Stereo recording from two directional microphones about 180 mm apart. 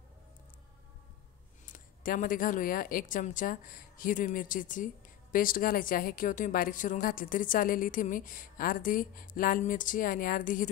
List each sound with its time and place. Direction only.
1.7 s a woman's voice: 50° left (ahead or behind)